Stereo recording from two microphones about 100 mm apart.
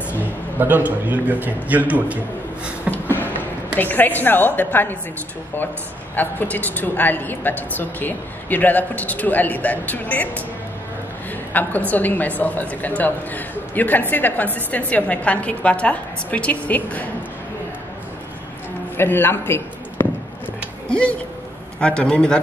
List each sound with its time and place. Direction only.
0.6 s a man's voice: 20° right (ahead or behind)
2.9 s a sound: 20° left (ahead or behind)
3.7 s a woman's voice: 20° left (ahead or behind)
6.1 s a woman's voice: 15° left (ahead or behind)
11.5 s a woman's voice: 15° left (ahead or behind)
18.9 s a man's voice: 20° left (ahead or behind)
21.7 s a woman's voice: 10° left (ahead or behind)